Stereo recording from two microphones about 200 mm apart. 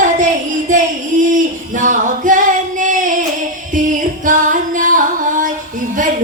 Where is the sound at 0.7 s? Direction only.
40° right (ahead or behind).